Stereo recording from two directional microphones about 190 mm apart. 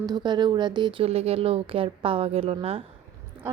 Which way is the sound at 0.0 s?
20° right (ahead or behind).